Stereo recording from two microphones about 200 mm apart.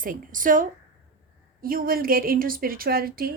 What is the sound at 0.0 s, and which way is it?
A woman's voice, 40° right (ahead or behind).